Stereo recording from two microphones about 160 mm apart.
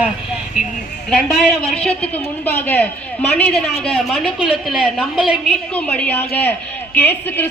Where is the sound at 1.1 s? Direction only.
Centre (ahead or behind).